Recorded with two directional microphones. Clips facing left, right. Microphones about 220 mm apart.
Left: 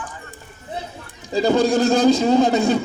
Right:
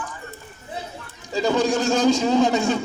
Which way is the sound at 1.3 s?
35° left (ahead or behind).